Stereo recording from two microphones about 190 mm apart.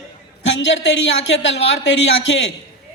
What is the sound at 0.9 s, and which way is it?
Speech, 65° left (ahead or behind).